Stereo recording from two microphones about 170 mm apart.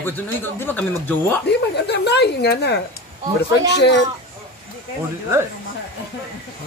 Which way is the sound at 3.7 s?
85° left.